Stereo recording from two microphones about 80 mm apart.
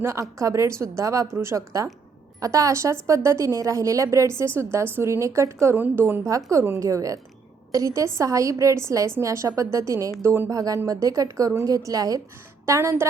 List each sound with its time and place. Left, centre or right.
0.0 s a woman's voice: right
5.7 s a woman's voice: right
10.5 s a woman's voice: right
12.6 s a woman's voice: right